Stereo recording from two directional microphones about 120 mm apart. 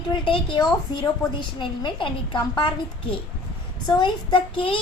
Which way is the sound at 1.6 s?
40° left (ahead or behind).